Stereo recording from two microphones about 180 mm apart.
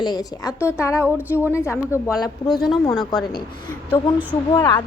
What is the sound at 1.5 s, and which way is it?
Speech, 15° left (ahead or behind).